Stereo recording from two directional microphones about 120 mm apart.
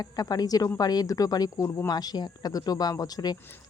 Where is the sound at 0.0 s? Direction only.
30° left (ahead or behind).